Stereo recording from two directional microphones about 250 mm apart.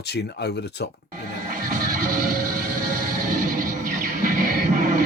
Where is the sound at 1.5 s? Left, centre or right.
Right.